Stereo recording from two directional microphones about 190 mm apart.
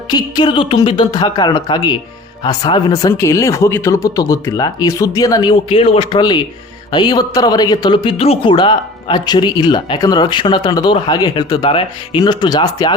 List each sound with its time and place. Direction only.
0.1 s speech: 20° left (ahead or behind)